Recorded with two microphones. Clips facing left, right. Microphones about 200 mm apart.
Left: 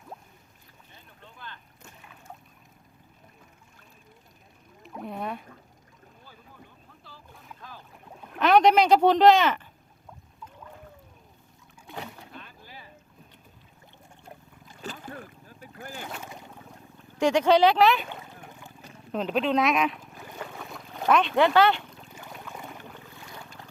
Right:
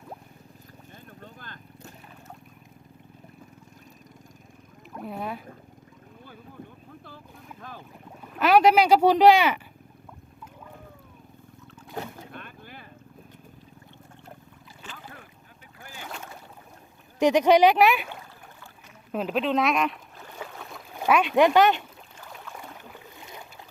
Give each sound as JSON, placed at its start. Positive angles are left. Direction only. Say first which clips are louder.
{"t": 1.2, "sound": "vehicle", "louder": "left 3 dB", "side_deg": -45}
{"t": 4.9, "sound": "a sound", "louder": "even", "side_deg": 0}
{"t": 7.1, "sound": "boat", "louder": "right 4 dB", "side_deg": -55}
{"t": 8.4, "sound": "speech", "louder": "right 1 dB", "side_deg": -5}
{"t": 11.9, "sound": "boat", "louder": "right 4 dB", "side_deg": -55}
{"t": 14.8, "sound": "boat", "louder": "left 7 dB", "side_deg": 40}
{"t": 17.2, "sound": "speech", "louder": "right 2 dB", "side_deg": -15}
{"t": 18.1, "sound": "a sound", "louder": "left 1 dB", "side_deg": 20}
{"t": 19.1, "sound": "speech", "louder": "even", "side_deg": -5}
{"t": 20.4, "sound": "boat", "louder": "even", "side_deg": 0}
{"t": 22.1, "sound": "boat", "louder": "left 1 dB", "side_deg": 0}
{"t": 23.1, "sound": "boat", "louder": "right 1 dB", "side_deg": -20}